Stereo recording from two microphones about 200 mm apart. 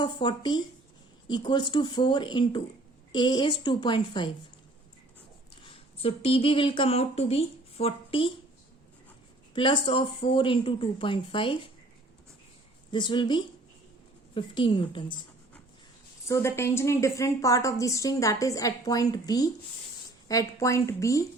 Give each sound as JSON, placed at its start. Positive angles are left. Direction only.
{"t": 0.0, "sound": "speech", "side_deg": 25}
{"t": 5.6, "sound": "speech", "side_deg": 30}
{"t": 9.6, "sound": "speech", "side_deg": 25}
{"t": 12.9, "sound": "speech", "side_deg": 25}
{"t": 16.2, "sound": "a woman's voice", "side_deg": 15}